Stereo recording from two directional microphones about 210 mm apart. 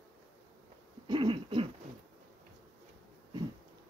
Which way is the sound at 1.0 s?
20° right (ahead or behind).